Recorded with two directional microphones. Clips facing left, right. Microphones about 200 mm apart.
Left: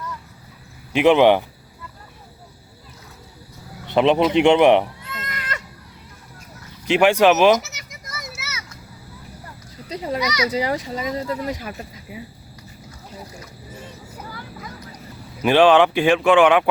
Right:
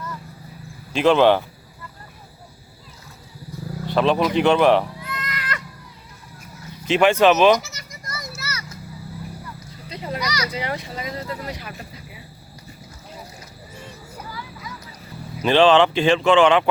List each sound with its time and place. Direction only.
0.9 s speech: 15° left (ahead or behind)
3.8 s sheep: 20° left (ahead or behind)
6.8 s speech: 15° left (ahead or behind)
8.3 s children playing: centre (ahead or behind)
9.9 s a child's voice: 40° left (ahead or behind)
10.2 s a child's voice: centre (ahead or behind)
10.5 s a child's voice: 40° left (ahead or behind)
15.4 s speech: 15° left (ahead or behind)